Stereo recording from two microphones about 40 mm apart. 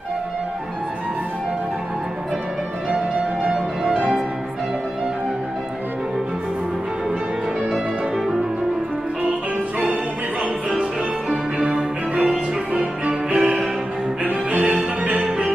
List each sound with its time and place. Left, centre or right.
11.2 s music: centre
12.7 s music: right